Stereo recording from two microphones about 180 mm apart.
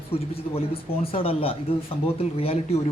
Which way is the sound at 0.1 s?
30° left (ahead or behind).